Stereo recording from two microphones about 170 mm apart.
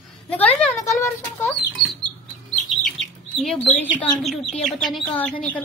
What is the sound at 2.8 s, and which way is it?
Chicken, centre (ahead or behind).